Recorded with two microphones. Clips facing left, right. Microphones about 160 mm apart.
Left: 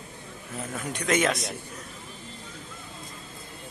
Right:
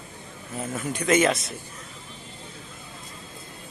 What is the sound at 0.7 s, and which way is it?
Speech, centre (ahead or behind).